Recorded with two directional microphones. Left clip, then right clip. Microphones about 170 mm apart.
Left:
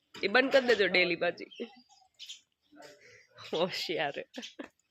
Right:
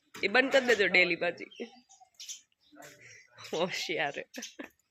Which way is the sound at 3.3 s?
5° left (ahead or behind).